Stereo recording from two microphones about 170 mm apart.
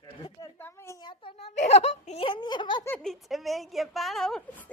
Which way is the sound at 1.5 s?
40° left (ahead or behind).